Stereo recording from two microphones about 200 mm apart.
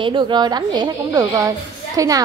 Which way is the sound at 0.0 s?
25° right (ahead or behind).